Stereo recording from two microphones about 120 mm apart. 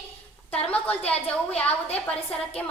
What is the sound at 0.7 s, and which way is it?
Speech, 10° left (ahead or behind).